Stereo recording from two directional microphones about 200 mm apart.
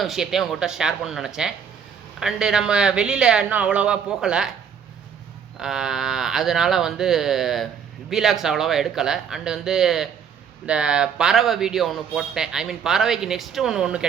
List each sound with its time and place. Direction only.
0.0 s a man's voice: centre (ahead or behind)
5.5 s a man's voice: 5° right (ahead or behind)